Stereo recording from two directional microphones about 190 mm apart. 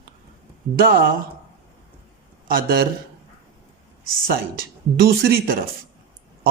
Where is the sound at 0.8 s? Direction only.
50° right (ahead or behind).